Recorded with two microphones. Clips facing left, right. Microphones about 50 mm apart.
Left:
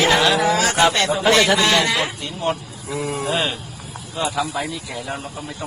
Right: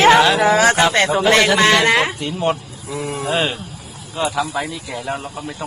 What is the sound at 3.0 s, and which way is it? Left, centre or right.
Speech, right.